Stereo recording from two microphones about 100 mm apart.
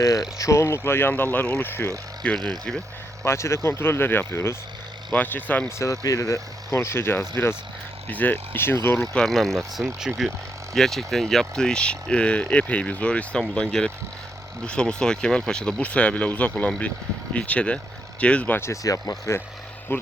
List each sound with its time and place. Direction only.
0.0 s speech: 35° left (ahead or behind)
2.2 s speech: 15° left (ahead or behind)
3.2 s speech: 30° left (ahead or behind)
5.1 s speech: 15° left (ahead or behind)
5.8 s speech: 35° left (ahead or behind)
9.1 s speech: centre (ahead or behind)
9.8 s speech: 15° right (ahead or behind)
10.8 s speech: 5° left (ahead or behind); by 18.7 s 20° left (ahead or behind)
18.7 s speech: 35° left (ahead or behind)
19.9 s speech: 20° left (ahead or behind)